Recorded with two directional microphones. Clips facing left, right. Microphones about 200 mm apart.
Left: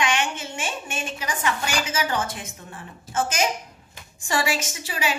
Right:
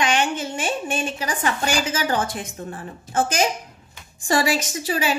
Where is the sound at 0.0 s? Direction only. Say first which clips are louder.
Right 3 dB; 35° right (ahead or behind).